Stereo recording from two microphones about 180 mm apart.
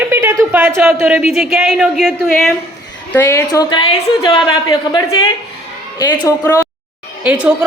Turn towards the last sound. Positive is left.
turn(degrees=-5)  # may be behind; listen again after turning